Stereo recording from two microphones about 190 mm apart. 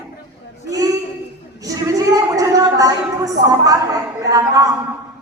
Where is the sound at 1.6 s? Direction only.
15° right (ahead or behind).